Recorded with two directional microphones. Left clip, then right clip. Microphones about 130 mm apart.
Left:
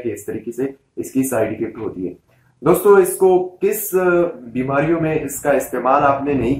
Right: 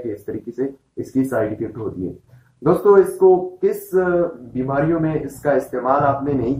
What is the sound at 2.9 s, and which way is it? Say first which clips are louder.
Speech: even; 30° left (ahead or behind).